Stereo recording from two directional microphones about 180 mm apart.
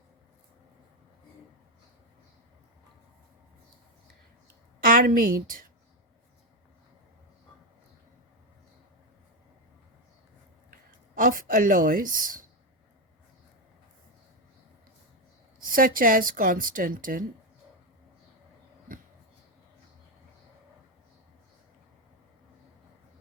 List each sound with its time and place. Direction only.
4.8 s a woman's voice: 50° right (ahead or behind)
10.7 s speech: 50° right (ahead or behind)
15.7 s speech: 50° right (ahead or behind)